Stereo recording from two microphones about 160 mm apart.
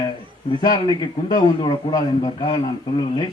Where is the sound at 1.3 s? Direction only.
25° left (ahead or behind).